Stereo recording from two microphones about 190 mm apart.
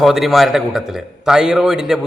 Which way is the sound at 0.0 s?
Centre (ahead or behind).